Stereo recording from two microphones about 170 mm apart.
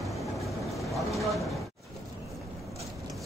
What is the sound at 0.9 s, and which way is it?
Vehicle, centre (ahead or behind).